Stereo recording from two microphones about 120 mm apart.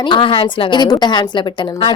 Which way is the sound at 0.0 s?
45° left (ahead or behind).